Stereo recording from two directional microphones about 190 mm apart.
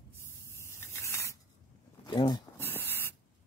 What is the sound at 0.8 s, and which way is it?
Spray, 15° left (ahead or behind).